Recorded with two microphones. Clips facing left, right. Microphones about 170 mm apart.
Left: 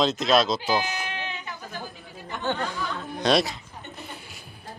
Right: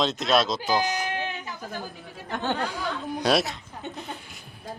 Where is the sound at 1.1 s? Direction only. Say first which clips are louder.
Right 4 dB; 50° right (ahead or behind).